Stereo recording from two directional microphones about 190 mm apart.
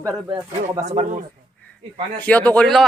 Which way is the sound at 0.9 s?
40° right (ahead or behind).